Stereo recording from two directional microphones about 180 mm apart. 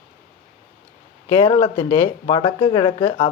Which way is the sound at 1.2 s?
30° left (ahead or behind).